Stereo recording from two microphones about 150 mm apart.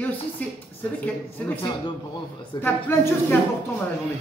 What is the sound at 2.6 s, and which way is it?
Speech, 15° left (ahead or behind).